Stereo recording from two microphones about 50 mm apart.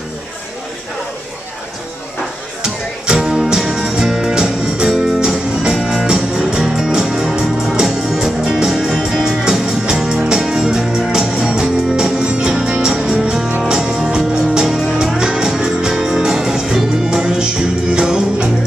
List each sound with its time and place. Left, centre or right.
2.6 s music: centre
5.8 s music: centre
6.0 s music: centre